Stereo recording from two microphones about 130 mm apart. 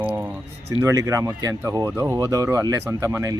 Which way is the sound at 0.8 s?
20° right (ahead or behind).